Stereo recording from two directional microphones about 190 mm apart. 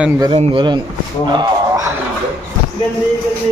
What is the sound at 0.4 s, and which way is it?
Speech, 25° right (ahead or behind).